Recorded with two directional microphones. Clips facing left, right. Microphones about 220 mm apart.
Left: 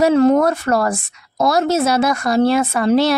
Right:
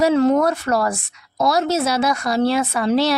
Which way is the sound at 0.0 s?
50° left (ahead or behind).